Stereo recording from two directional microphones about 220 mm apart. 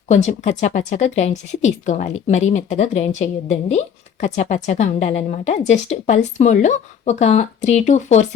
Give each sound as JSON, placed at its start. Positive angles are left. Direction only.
{"t": 0.1, "sound": "speech", "side_deg": 30}